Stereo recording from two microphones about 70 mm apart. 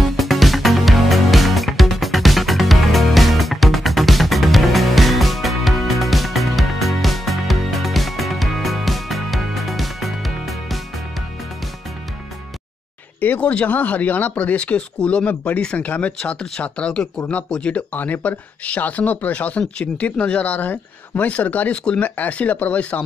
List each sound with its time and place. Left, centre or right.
0.1 s music: centre
13.2 s speech: left